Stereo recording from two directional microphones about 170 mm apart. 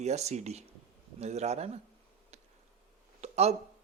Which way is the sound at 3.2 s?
40° right (ahead or behind).